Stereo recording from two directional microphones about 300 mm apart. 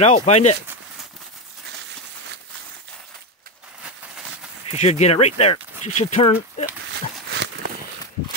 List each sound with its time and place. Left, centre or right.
0.0 s speech: left
4.6 s speech: left
6.9 s a sound: right